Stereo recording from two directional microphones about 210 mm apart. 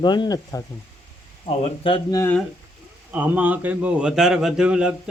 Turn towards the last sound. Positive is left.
turn(degrees=-5)  # may be behind; listen again after turning